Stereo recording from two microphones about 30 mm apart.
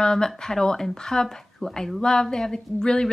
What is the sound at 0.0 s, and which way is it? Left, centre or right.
Speech, left.